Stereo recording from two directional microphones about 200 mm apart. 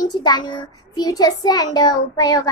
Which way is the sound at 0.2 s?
20° left (ahead or behind).